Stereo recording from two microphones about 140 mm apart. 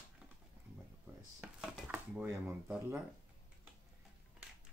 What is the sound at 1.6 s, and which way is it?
Chopping, 5° right (ahead or behind).